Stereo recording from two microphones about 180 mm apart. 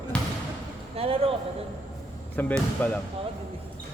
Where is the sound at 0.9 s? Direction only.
30° right (ahead or behind).